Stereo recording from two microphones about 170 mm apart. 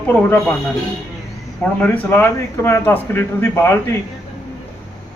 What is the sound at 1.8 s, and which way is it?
A man's voice, 15° left (ahead or behind).